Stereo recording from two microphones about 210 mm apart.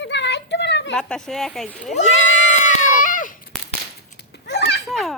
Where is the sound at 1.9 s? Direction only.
35° left (ahead or behind).